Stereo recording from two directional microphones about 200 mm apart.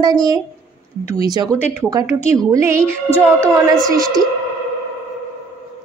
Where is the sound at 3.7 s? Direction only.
Centre (ahead or behind).